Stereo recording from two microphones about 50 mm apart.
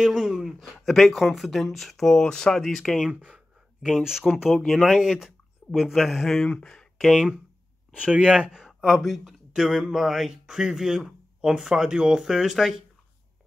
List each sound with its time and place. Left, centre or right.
0.0 s a sound: centre
0.8 s speech: centre
2.6 s speech: centre
3.3 s a sound: centre
4.2 s speech: centre
6.4 s speech: centre
7.0 s speech: centre
8.0 s speech: right
8.6 s speech: centre